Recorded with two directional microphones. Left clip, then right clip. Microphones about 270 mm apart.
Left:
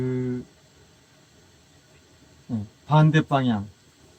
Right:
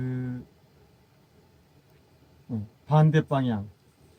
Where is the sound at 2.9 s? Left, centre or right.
Right.